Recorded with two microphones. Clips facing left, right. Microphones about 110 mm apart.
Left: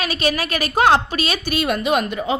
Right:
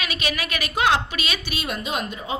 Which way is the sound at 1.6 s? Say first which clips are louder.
Left 9 dB; 65° left (ahead or behind).